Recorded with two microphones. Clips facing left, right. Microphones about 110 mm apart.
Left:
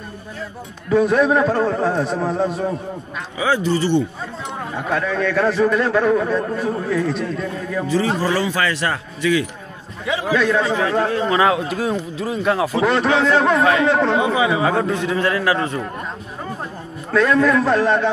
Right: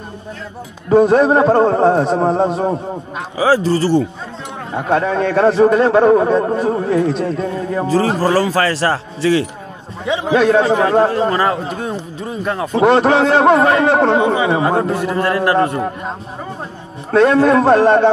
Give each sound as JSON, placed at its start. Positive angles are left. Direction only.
{"t": 0.8, "sound": "a man's voice", "side_deg": -40}
{"t": 10.3, "sound": "a man's voice", "side_deg": -45}
{"t": 12.2, "sound": "speech", "side_deg": 5}
{"t": 12.7, "sound": "a man's voice", "side_deg": -40}
{"t": 13.8, "sound": "speech", "side_deg": -60}
{"t": 14.1, "sound": "a man's voice", "side_deg": -40}
{"t": 17.1, "sound": "a man's voice", "side_deg": -35}